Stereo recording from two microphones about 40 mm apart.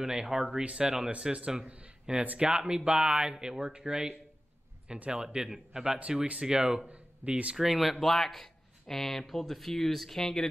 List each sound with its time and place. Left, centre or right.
0.0 s speech: centre
0.7 s speech: right
4.9 s speech: right
5.2 s speech: right
6.9 s speech: right
7.5 s speech: centre
8.0 s speech: centre